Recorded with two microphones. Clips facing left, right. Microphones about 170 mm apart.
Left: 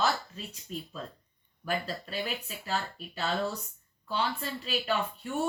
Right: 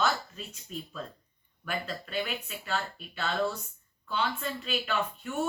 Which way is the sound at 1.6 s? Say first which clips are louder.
Left 2 dB; 35° left (ahead or behind).